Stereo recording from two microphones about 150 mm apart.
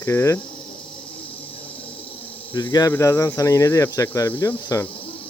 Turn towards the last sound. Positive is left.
turn(degrees=20)  # may be behind; listen again after turning